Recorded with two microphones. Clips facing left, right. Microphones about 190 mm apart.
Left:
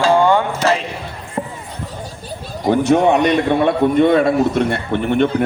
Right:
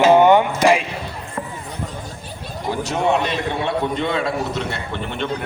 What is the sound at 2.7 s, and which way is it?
A man's voice, 55° left (ahead or behind).